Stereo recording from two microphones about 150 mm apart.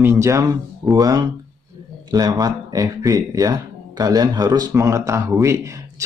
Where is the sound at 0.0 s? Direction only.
20° right (ahead or behind).